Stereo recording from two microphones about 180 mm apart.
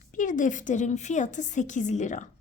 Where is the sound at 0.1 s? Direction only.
45° left (ahead or behind).